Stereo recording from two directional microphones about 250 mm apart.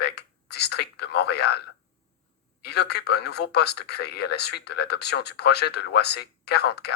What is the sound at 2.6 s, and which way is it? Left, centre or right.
Speech, left.